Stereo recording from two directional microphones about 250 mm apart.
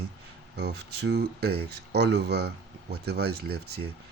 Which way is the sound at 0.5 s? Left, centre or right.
Right.